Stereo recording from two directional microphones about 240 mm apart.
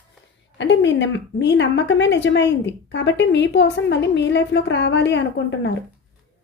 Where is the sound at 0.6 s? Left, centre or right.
Left.